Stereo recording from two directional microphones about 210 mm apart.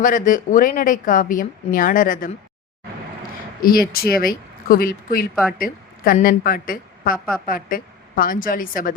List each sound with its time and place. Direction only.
0.0 s a woman's voice: 40° left (ahead or behind)
3.6 s speech: 45° left (ahead or behind)
5.3 s speech: centre (ahead or behind)
5.5 s a woman's voice: 45° left (ahead or behind)